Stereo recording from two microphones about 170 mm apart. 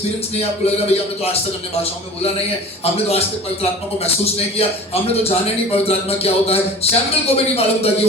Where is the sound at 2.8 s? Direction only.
35° left (ahead or behind).